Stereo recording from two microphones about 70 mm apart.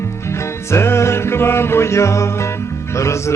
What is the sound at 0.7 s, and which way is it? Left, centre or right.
Music, left.